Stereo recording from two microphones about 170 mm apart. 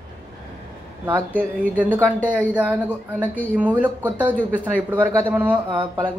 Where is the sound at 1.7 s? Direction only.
10° right (ahead or behind).